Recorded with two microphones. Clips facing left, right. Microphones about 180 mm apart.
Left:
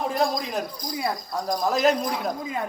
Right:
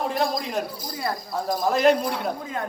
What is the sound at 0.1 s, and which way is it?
A man's voice, centre (ahead or behind).